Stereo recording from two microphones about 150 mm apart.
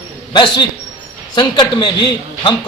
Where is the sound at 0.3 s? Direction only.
30° left (ahead or behind).